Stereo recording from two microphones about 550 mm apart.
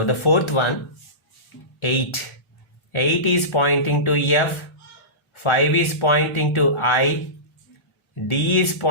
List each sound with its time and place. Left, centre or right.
0.0 s speech: left
1.8 s speech: left
8.3 s speech: left